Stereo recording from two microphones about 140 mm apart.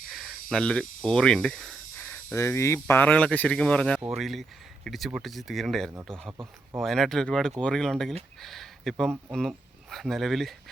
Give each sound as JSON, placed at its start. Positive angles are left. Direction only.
{"t": 0.1, "sound": "speech", "side_deg": -5}
{"t": 6.3, "sound": "speech", "side_deg": -15}
{"t": 6.8, "sound": "speech", "side_deg": 0}